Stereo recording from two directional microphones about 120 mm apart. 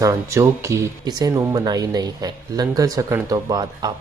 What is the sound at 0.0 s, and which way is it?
Speech, 25° right (ahead or behind).